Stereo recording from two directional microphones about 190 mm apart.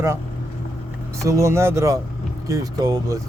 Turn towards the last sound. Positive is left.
turn(degrees=-20)  # may be behind; listen again after turning